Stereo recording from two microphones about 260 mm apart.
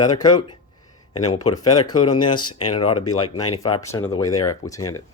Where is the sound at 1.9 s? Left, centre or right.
Centre.